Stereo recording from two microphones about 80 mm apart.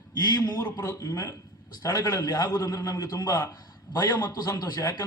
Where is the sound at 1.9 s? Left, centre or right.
Left.